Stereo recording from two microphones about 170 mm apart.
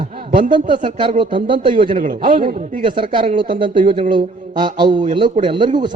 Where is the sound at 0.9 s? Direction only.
30° right (ahead or behind).